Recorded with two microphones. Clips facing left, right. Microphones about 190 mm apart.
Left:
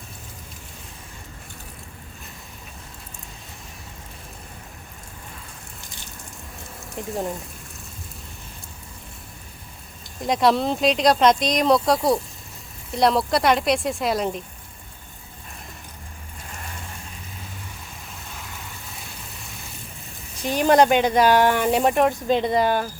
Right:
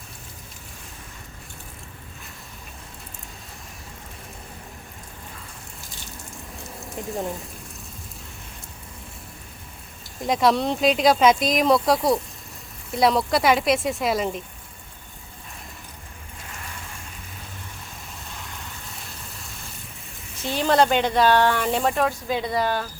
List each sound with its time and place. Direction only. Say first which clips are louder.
6.7 s speech: left 1 dB; centre (ahead or behind)
10.2 s speech: left 1 dB; centre (ahead or behind)
18.3 s vehicle: left 1 dB; centre (ahead or behind)
20.7 s speech: left 3 dB; 15° left (ahead or behind)